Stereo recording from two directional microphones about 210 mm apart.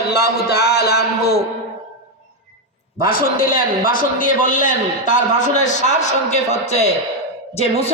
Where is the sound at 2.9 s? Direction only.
45° left (ahead or behind).